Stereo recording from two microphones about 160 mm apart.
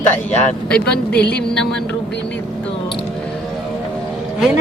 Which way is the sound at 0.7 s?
5° left (ahead or behind).